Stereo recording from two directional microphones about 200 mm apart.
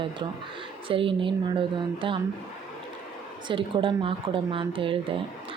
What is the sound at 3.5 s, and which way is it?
Speech, 25° right (ahead or behind).